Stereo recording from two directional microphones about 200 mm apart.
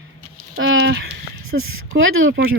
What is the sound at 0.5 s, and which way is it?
Speech, 85° right.